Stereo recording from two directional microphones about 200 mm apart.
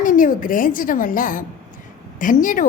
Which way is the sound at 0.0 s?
40° left (ahead or behind).